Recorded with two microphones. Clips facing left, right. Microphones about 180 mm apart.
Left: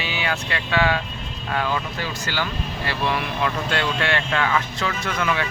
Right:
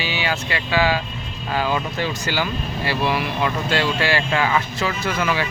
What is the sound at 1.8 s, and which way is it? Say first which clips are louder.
Speech: right 4 dB; 20° right (ahead or behind).